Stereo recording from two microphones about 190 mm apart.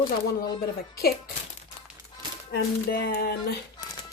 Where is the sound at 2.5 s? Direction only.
60° left (ahead or behind).